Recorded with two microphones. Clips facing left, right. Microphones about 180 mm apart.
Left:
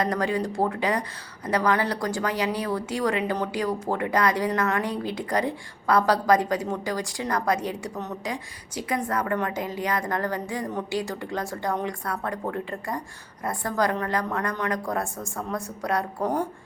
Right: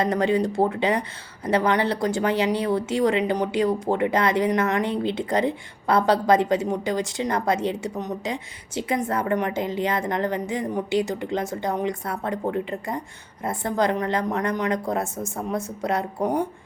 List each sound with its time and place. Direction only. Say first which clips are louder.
0.0 s a woman's voice: right 4 dB; 25° right (ahead or behind)